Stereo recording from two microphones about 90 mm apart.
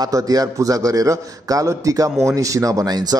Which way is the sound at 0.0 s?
40° right (ahead or behind).